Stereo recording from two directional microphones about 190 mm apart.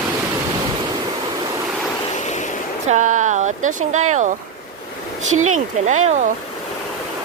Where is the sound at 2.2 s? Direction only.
40° left (ahead or behind).